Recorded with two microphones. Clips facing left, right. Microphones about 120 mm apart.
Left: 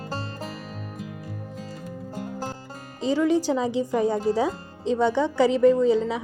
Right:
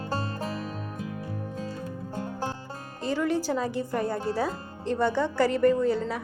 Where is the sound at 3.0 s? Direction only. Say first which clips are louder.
Left 5 dB; 10° left (ahead or behind).